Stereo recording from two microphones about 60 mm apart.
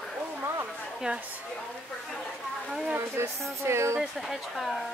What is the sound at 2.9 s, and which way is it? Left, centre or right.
A woman's voice, right.